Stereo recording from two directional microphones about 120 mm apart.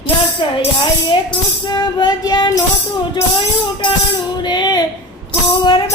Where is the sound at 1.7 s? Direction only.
40° left (ahead or behind).